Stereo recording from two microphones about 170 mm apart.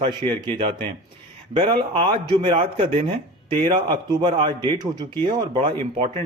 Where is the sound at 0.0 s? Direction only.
30° right (ahead or behind).